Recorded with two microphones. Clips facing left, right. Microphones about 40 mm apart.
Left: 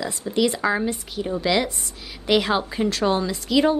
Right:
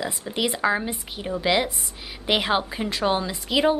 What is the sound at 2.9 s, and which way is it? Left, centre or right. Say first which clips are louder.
Speech: left 2 dB; centre.